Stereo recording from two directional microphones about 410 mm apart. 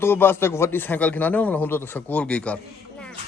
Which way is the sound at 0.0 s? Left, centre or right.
Centre.